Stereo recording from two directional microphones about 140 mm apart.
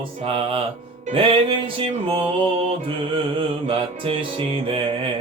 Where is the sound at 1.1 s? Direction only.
40° right (ahead or behind).